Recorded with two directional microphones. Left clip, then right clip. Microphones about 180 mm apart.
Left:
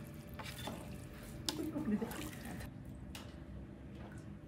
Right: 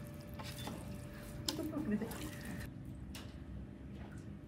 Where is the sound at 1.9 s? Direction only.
25° right (ahead or behind).